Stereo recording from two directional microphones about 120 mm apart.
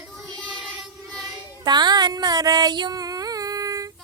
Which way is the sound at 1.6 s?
35° right (ahead or behind).